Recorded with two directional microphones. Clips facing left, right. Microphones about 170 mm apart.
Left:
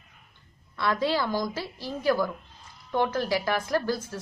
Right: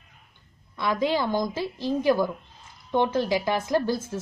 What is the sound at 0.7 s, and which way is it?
A woman's voice, 15° right (ahead or behind).